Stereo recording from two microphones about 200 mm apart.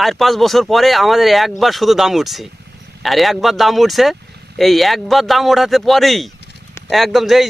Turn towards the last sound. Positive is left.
turn(degrees=0)  # may be behind; listen again after turning